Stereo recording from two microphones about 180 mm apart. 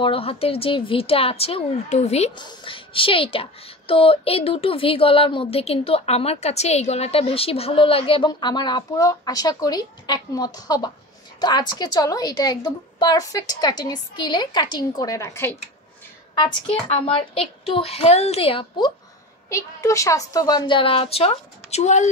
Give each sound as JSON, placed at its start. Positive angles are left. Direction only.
{"t": 0.0, "sound": "a woman's voice", "side_deg": 30}
{"t": 16.6, "sound": "a woman's voice", "side_deg": 30}
{"t": 19.5, "sound": "speech", "side_deg": 15}